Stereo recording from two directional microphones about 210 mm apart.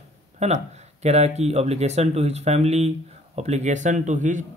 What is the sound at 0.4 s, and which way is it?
Speech, 30° right (ahead or behind).